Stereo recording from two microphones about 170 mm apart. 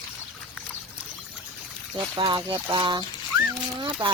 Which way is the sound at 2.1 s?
30° right (ahead or behind).